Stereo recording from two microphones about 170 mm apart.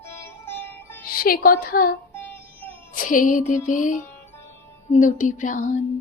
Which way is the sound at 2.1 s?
10° left (ahead or behind).